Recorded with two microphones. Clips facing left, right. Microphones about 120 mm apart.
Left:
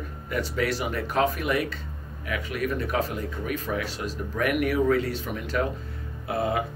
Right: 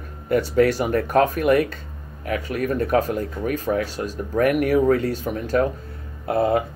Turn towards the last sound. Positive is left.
turn(degrees=-40)  # may be behind; listen again after turning